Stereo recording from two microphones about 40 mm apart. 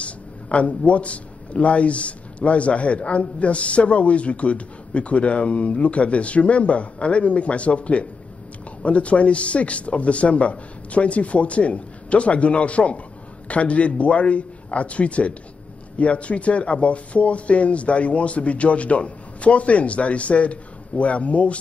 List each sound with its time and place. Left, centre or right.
0.0 s a man's voice: left